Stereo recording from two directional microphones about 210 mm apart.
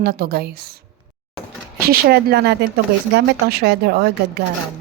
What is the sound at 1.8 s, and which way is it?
A woman's voice, 45° right (ahead or behind).